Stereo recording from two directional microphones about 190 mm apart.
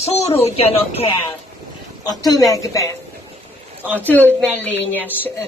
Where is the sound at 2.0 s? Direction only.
20° left (ahead or behind).